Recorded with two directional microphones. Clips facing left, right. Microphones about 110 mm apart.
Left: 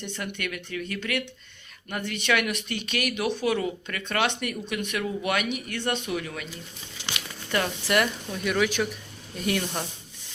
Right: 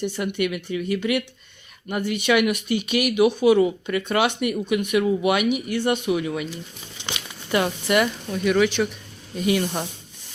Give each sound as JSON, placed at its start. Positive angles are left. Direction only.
{"t": 0.0, "sound": "speech", "side_deg": -10}
{"t": 7.0, "sound": "crumpling", "side_deg": -15}
{"t": 7.9, "sound": "a woman's voice", "side_deg": -5}